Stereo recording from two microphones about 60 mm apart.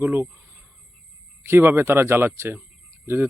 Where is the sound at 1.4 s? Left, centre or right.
Right.